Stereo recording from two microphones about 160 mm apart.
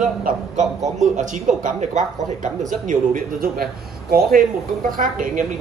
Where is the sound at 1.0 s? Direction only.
50° right (ahead or behind); by 4.4 s 70° right (ahead or behind).